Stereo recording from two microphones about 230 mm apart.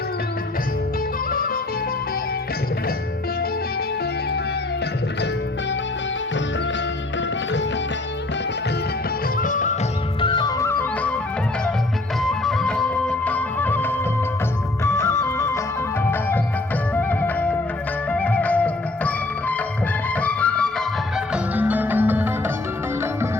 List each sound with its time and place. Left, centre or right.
9.4 s music: left
10.2 s music: left
12.3 s music: centre
16.9 s music: centre
21.3 s music: centre